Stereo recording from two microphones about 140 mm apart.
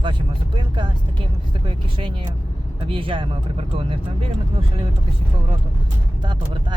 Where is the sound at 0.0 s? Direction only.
35° right (ahead or behind).